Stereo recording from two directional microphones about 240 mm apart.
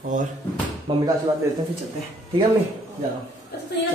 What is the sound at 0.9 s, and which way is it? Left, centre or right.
Speech, centre.